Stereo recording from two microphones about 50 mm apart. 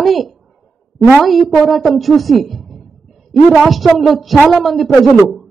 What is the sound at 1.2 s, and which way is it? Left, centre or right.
A woman's voice, centre.